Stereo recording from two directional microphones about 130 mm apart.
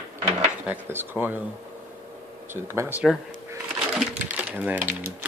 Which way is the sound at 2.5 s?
20° right (ahead or behind).